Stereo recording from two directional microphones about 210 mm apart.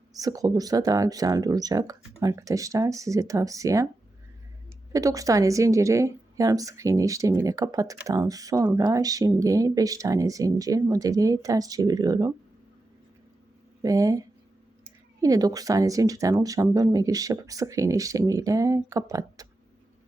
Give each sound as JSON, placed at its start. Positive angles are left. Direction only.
{"t": 0.2, "sound": "a woman's voice", "side_deg": -15}
{"t": 4.9, "sound": "a woman's voice", "side_deg": -15}
{"t": 13.8, "sound": "a woman's voice", "side_deg": -15}